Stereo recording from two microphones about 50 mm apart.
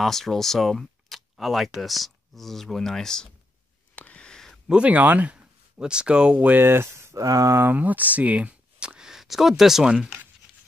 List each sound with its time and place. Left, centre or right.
0.0 s speech: centre
3.9 s a sound: left
4.8 s speech: right
5.8 s speech: centre
6.3 s speech: right
7.6 s speech: right; by 9.8 s centre